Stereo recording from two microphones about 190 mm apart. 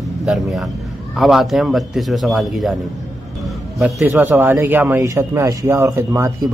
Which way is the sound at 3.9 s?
10° right (ahead or behind).